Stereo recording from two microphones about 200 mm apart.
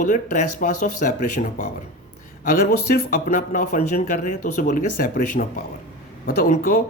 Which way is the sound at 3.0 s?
40° left (ahead or behind).